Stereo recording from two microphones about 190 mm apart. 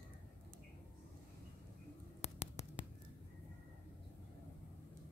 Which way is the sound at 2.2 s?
35° left (ahead or behind).